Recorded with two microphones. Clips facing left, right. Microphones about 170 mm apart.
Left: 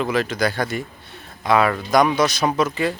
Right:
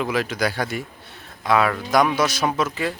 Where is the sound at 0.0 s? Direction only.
10° right (ahead or behind).